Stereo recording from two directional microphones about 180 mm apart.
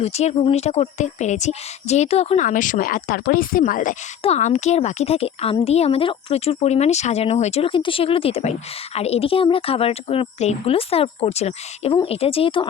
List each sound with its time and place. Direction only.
0.0 s a woman's voice: 35° left (ahead or behind)